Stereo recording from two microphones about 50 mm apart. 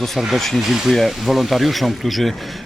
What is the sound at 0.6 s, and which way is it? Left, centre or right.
A man's voice, centre.